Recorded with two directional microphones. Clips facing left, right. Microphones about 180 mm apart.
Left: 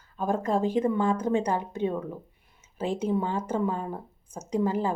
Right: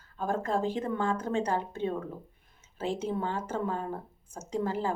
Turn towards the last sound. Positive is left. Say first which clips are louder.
# left 5 dB
turn(degrees=15)  # may be behind; listen again after turning